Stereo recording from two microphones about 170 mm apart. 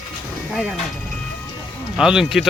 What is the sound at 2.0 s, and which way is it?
Speech, 5° right (ahead or behind).